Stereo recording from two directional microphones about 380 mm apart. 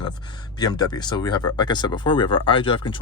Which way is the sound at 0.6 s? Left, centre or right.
Centre.